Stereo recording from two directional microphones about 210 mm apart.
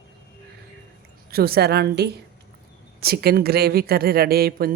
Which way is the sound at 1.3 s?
45° right (ahead or behind).